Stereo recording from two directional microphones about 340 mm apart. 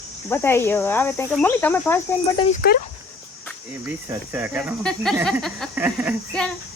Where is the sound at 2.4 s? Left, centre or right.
Left.